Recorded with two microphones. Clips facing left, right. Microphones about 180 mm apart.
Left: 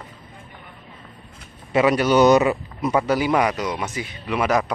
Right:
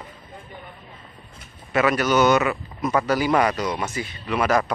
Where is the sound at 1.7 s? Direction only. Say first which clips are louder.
Left 3 dB; 30° left (ahead or behind).